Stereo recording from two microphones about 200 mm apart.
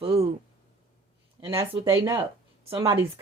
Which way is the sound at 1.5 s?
15° right (ahead or behind).